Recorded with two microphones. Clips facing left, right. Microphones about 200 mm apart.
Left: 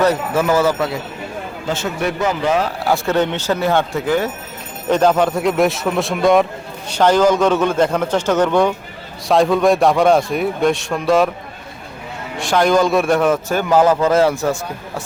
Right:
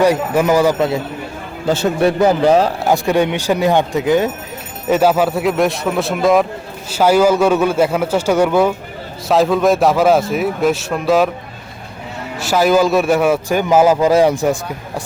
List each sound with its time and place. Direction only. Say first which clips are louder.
0.0 s a man's voice: right 3 dB; 15° right (ahead or behind)
1.6 s speech: right 7 dB; 35° right (ahead or behind)
2.8 s a man's voice: right 2 dB; 15° right (ahead or behind)
4.9 s a man's voice: right 1 dB; 5° right (ahead or behind)
12.4 s a man's voice: right 1 dB; 5° right (ahead or behind)